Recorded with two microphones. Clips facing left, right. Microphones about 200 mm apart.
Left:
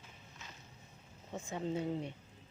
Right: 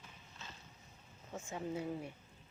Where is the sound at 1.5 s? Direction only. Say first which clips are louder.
Left 4 dB; 25° left (ahead or behind).